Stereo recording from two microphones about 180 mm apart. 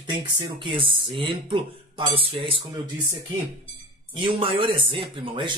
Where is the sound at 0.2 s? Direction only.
30° right (ahead or behind).